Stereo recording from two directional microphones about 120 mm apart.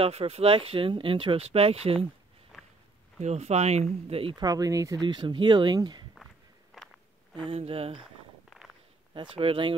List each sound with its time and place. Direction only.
0.0 s speech: 55° right (ahead or behind)
2.5 s walk: 5° right (ahead or behind)
3.2 s speech: 65° right (ahead or behind)
4.4 s speech: 30° right (ahead or behind)
5.0 s speech: 40° right (ahead or behind)
6.7 s a sound: 5° left (ahead or behind)
7.4 s speech: 55° right (ahead or behind)
8.0 s a sound: centre (ahead or behind)
9.4 s speech: 50° right (ahead or behind)